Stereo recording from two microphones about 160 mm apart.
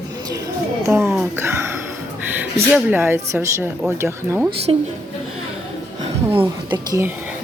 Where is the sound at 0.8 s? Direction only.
15° right (ahead or behind).